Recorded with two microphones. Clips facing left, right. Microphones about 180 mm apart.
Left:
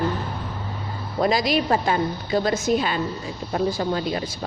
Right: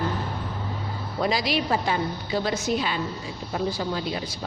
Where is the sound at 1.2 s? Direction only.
45° left (ahead or behind).